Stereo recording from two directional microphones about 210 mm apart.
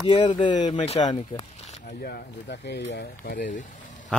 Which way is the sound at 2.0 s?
50° left (ahead or behind).